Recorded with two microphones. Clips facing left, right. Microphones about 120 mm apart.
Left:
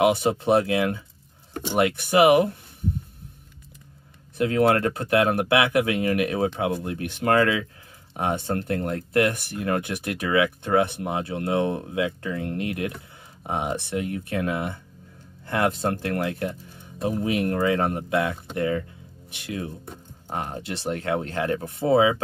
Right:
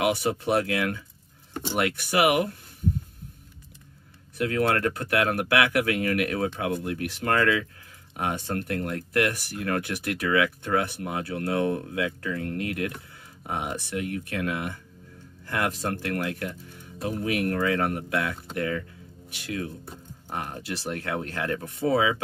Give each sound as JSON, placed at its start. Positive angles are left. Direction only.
{"t": 0.0, "sound": "speech", "side_deg": 25}
{"t": 4.4, "sound": "speech", "side_deg": 25}